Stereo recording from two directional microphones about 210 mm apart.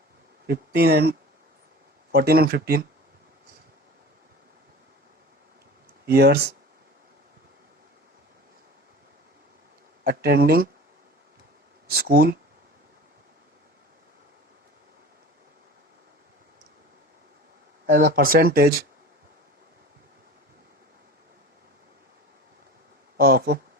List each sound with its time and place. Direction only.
0.4 s speech: 50° right (ahead or behind)
2.1 s speech: 50° right (ahead or behind)
6.1 s speech: 50° right (ahead or behind)
10.0 s speech: 45° right (ahead or behind)
11.9 s speech: 45° right (ahead or behind)
17.9 s speech: 45° right (ahead or behind)
23.1 s speech: 45° right (ahead or behind)